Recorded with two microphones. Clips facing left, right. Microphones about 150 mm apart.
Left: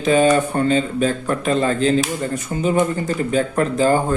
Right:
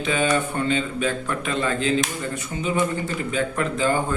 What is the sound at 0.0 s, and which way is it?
A man's voice, 40° left (ahead or behind).